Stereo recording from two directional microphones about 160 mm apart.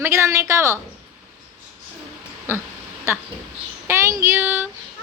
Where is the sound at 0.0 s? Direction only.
15° right (ahead or behind).